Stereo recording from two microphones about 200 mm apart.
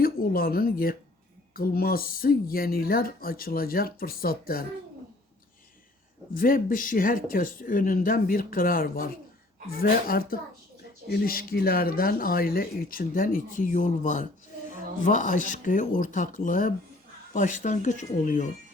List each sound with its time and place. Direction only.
0.0 s speech: 45° left (ahead or behind)
6.3 s speech: 45° left (ahead or behind)